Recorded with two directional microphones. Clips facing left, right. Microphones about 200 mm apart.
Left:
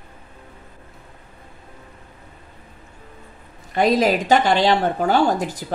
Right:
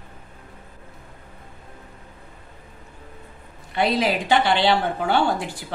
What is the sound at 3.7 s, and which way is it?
Speech, 45° left (ahead or behind).